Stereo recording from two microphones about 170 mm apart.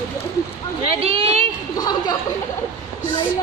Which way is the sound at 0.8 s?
35° right (ahead or behind).